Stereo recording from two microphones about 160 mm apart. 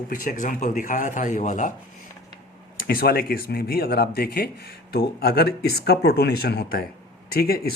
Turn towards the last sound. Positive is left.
turn(degrees=75)  # may be behind; listen again after turning